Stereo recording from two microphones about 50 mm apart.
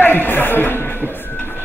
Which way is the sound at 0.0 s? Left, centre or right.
Left.